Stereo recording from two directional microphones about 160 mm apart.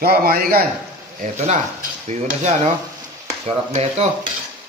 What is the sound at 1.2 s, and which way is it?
Speech, 50° right (ahead or behind).